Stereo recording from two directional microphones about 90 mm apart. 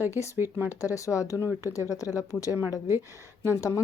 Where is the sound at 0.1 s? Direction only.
35° left (ahead or behind).